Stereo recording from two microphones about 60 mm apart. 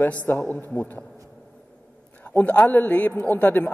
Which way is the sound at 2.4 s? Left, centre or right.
Left.